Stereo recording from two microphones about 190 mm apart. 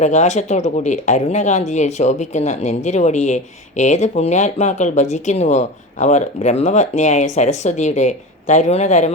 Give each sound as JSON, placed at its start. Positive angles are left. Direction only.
{"t": 0.0, "sound": "speech", "side_deg": 40}